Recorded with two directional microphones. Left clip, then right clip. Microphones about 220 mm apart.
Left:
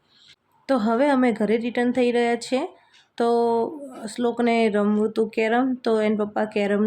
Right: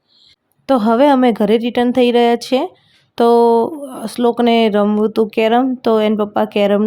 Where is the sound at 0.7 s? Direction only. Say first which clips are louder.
Right 9 dB; 30° right (ahead or behind).